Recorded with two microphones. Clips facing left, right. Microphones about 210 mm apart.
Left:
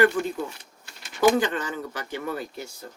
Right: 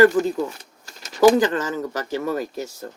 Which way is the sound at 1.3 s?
40° right (ahead or behind).